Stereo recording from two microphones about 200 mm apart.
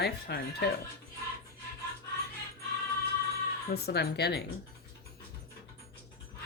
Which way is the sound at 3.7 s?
50° left (ahead or behind).